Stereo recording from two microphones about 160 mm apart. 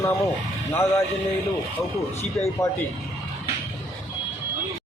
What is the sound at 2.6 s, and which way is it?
Speech, 15° left (ahead or behind).